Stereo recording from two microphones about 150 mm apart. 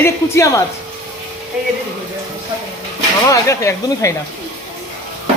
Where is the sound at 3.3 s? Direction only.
20° left (ahead or behind).